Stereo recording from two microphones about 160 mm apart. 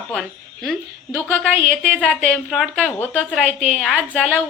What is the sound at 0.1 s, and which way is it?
Speech, centre (ahead or behind).